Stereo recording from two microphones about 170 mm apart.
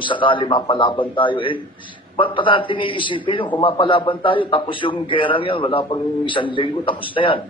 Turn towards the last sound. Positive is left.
turn(degrees=30)  # may be behind; listen again after turning